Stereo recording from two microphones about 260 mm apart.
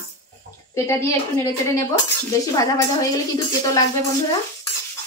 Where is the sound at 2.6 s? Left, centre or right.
Centre.